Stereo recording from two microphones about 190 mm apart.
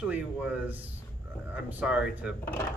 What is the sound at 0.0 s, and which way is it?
Speech, 5° right (ahead or behind).